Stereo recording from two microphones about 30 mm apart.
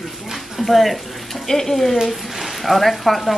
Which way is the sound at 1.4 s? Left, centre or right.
Centre.